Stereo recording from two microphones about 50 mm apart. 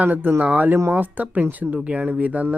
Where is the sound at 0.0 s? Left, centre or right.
Right.